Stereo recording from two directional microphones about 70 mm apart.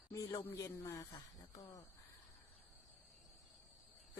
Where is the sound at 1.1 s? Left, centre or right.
Left.